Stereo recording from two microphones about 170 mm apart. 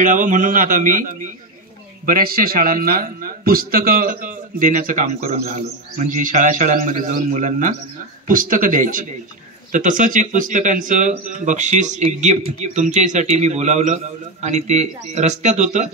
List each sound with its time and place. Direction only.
0.0 s a man's voice: 50° right (ahead or behind)